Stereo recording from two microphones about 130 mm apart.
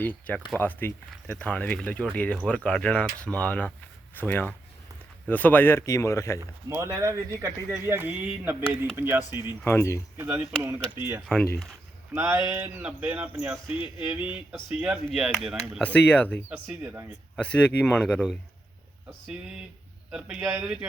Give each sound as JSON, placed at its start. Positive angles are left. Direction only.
{"t": 0.0, "sound": "speech", "side_deg": 10}
{"t": 6.4, "sound": "speech", "side_deg": -20}
{"t": 9.6, "sound": "speech", "side_deg": 20}
{"t": 10.2, "sound": "speech", "side_deg": -15}
{"t": 11.3, "sound": "speech", "side_deg": 5}
{"t": 12.1, "sound": "speech", "side_deg": -20}
{"t": 15.8, "sound": "speech", "side_deg": 10}
{"t": 16.8, "sound": "speech", "side_deg": -20}
{"t": 17.3, "sound": "speech", "side_deg": 10}
{"t": 20.1, "sound": "a man's voice", "side_deg": -5}
{"t": 20.4, "sound": "speech", "side_deg": -25}